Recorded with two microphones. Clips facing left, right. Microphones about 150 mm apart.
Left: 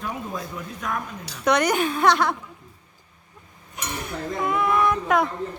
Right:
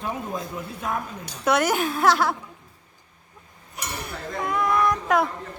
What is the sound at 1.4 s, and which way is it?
Speech, 5° right (ahead or behind).